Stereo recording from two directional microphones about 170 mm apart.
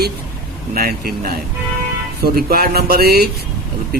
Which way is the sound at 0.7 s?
60° right (ahead or behind).